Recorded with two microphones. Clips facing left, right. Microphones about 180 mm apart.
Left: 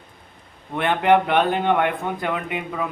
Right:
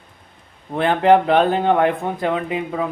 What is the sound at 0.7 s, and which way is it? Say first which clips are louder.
Speech: right 3 dB; 35° right (ahead or behind).